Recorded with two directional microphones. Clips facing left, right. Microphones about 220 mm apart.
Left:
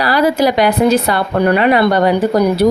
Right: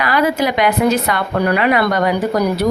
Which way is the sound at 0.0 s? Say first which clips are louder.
Left 3 dB; 35° left (ahead or behind).